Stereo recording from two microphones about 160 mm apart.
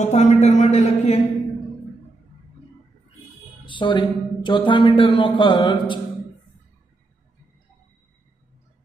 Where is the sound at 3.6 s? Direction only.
30° left (ahead or behind).